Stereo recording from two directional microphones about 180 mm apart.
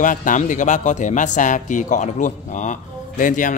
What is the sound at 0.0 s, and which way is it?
Speech, 45° left (ahead or behind).